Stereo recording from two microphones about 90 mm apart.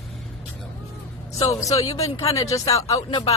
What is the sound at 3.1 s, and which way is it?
Speech, 60° left (ahead or behind).